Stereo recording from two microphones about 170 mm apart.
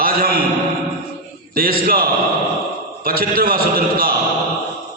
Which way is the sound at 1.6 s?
60° right (ahead or behind).